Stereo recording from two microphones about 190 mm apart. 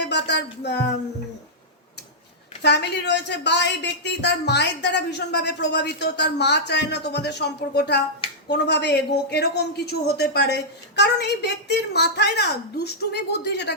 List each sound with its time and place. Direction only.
0.0 s a woman's voice: 65° left (ahead or behind)
2.6 s a woman's voice: 60° left (ahead or behind)